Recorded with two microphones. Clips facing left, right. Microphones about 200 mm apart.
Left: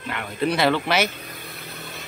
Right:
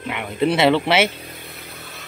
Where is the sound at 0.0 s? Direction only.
20° right (ahead or behind).